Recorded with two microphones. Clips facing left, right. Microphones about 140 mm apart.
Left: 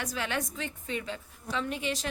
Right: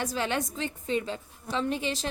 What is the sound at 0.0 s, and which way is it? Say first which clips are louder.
A woman's voice: right 4 dB; 30° right (ahead or behind).